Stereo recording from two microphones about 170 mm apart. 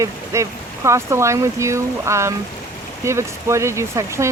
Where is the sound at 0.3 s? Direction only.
15° right (ahead or behind).